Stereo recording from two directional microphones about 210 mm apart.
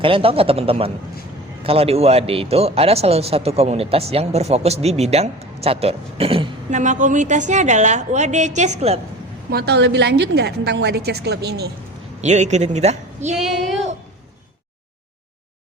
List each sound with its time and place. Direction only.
0.0 s speech: 25° right (ahead or behind)
9.5 s a woman's voice: 50° right (ahead or behind)
12.2 s a woman's voice: 35° right (ahead or behind)
13.3 s speech: centre (ahead or behind)